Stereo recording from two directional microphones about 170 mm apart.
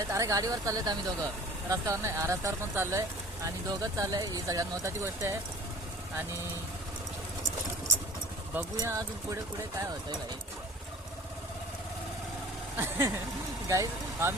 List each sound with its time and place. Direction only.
0.1 s speech: 20° right (ahead or behind)
8.5 s speech: 20° right (ahead or behind)
12.7 s speech: 15° right (ahead or behind)